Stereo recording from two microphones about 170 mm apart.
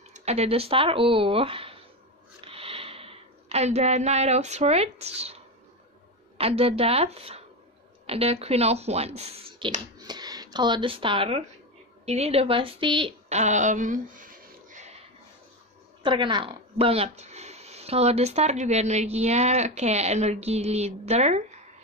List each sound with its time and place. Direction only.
0.1 s speech: 40° right (ahead or behind)
2.4 s a sound: 35° right (ahead or behind)
6.3 s speech: 35° right (ahead or behind)
9.9 s a woman's voice: 25° right (ahead or behind); by 15.0 s 45° right (ahead or behind)
16.0 s speech: 30° right (ahead or behind)